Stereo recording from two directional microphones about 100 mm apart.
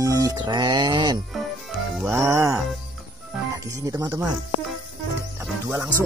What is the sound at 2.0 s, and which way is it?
Music, 30° right (ahead or behind).